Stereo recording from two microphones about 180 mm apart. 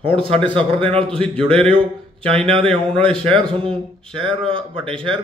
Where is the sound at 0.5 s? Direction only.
30° right (ahead or behind).